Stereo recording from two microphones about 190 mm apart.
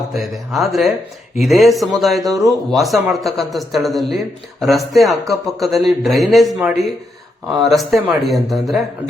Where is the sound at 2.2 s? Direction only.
20° right (ahead or behind).